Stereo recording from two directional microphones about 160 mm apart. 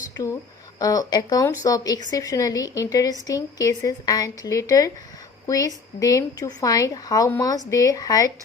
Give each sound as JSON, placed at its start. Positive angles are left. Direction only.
{"t": 0.8, "sound": "speech", "side_deg": 20}